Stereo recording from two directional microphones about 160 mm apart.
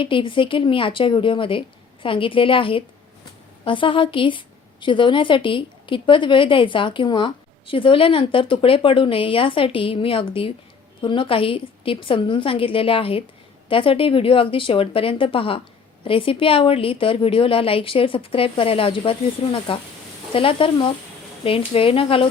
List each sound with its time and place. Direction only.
0.0 s a woman's voice: 30° left (ahead or behind)